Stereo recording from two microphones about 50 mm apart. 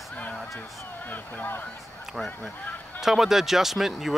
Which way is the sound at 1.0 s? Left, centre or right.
Left.